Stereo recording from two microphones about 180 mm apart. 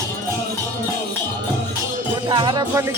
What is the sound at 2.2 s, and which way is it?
Music, 25° right (ahead or behind).